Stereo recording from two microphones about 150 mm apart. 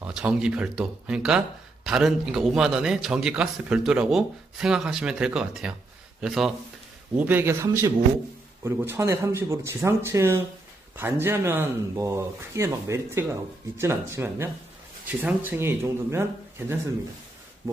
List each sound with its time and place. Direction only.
0.0 s a man's voice: 5° right (ahead or behind)
7.2 s speech: 15° right (ahead or behind)